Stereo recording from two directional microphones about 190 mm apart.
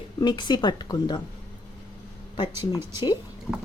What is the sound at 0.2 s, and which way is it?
A woman's voice, 25° left (ahead or behind).